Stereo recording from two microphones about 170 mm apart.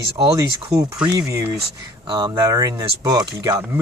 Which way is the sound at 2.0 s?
25° right (ahead or behind).